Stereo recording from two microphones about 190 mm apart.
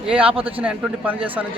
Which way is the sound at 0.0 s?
30° right (ahead or behind).